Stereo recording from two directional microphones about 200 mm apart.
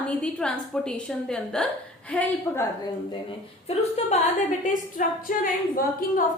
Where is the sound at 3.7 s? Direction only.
30° left (ahead or behind).